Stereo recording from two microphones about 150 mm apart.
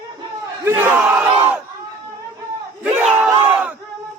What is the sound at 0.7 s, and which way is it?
Battle cry, 10° right (ahead or behind).